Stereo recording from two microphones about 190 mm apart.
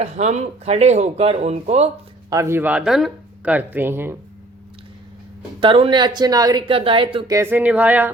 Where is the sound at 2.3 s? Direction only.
15° right (ahead or behind).